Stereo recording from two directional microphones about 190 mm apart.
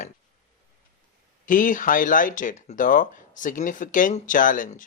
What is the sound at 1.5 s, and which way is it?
Speech, 45° left (ahead or behind).